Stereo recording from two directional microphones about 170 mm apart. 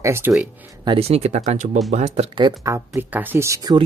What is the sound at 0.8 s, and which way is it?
Speech, 35° right (ahead or behind).